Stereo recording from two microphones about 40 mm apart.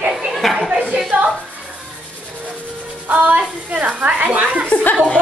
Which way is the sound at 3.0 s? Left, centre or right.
Right.